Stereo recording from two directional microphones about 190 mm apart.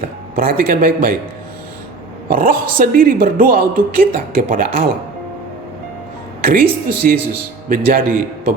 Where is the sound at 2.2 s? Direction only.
50° right (ahead or behind).